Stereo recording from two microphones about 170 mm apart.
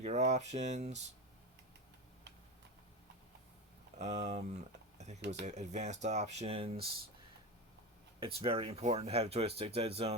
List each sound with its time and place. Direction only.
0.0 s speech: 40° right (ahead or behind)
3.9 s speech: 40° right (ahead or behind)
8.2 s speech: 35° right (ahead or behind)